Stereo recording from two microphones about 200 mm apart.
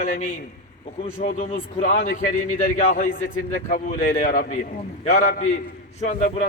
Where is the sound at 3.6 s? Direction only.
40° left (ahead or behind).